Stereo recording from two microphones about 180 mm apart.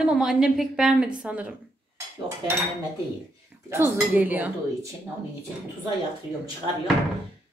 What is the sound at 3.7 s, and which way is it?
A woman's voice, 10° right (ahead or behind).